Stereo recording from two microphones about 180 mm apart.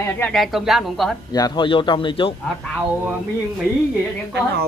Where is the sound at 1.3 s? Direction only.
25° left (ahead or behind).